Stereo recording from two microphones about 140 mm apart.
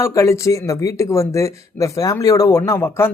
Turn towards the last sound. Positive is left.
turn(degrees=15)  # may be behind; listen again after turning